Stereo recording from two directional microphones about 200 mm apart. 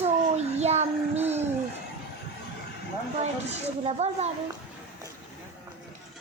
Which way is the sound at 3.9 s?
30° right (ahead or behind).